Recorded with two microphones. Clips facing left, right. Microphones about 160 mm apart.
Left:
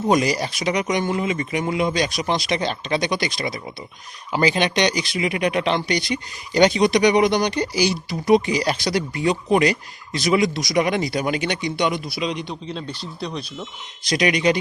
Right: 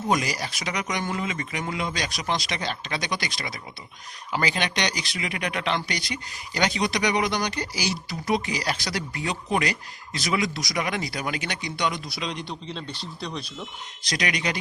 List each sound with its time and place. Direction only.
0.1 s speech: 25° left (ahead or behind)
10.8 s speech: 25° left (ahead or behind)
12.0 s speech: 5° left (ahead or behind)
14.2 s speech: 20° left (ahead or behind)